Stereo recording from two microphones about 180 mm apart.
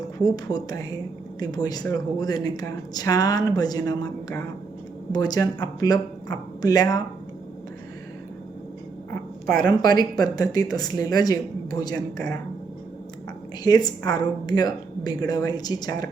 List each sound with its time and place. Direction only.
0.3 s speech: 20° left (ahead or behind)
9.6 s speech: 20° left (ahead or behind)
13.7 s speech: 20° left (ahead or behind)